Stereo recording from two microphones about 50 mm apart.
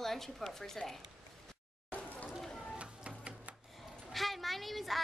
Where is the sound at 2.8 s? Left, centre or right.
Right.